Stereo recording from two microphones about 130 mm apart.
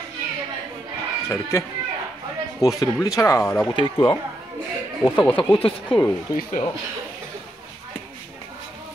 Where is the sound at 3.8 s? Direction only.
40° left (ahead or behind).